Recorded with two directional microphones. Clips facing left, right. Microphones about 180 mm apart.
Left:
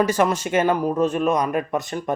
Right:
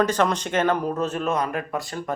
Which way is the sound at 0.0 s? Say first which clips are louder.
Left 2 dB; 10° left (ahead or behind).